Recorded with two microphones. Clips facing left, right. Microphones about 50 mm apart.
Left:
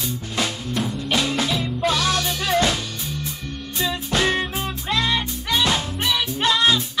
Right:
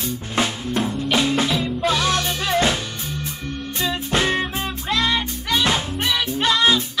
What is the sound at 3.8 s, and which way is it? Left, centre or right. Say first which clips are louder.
Music: even; right.